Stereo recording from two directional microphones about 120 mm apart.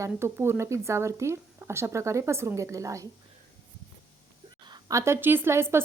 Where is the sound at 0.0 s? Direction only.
20° right (ahead or behind).